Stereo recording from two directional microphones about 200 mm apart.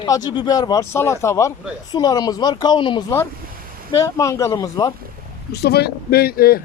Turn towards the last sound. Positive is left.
turn(degrees=50)  # may be behind; listen again after turning